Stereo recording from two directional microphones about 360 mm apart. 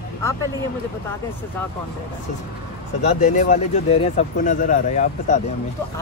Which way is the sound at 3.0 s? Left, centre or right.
Centre.